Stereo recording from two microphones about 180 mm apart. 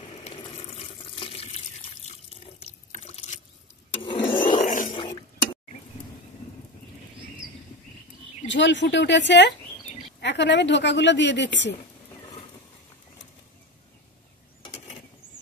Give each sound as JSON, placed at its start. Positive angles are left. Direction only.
{"t": 0.2, "sound": "water tap", "side_deg": 30}
{"t": 2.0, "sound": "water", "side_deg": 35}
{"t": 4.0, "sound": "rub", "side_deg": 25}
{"t": 4.5, "sound": "zipper", "side_deg": 40}
{"t": 4.9, "sound": "a sound", "side_deg": 25}
{"t": 8.5, "sound": "speech", "side_deg": 80}